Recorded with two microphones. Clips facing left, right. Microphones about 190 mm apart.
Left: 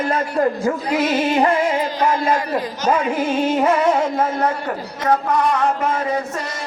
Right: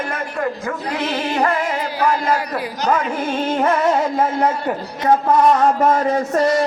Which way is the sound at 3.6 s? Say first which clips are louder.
Right 1 dB; centre (ahead or behind).